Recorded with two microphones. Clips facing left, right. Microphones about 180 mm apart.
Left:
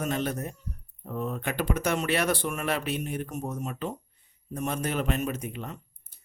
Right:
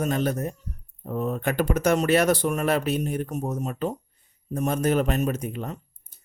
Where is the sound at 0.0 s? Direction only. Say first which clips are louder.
Right 5 dB; 40° right (ahead or behind).